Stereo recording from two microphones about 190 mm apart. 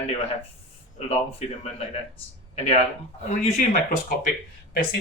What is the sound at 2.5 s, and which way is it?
Speech, 35° left (ahead or behind).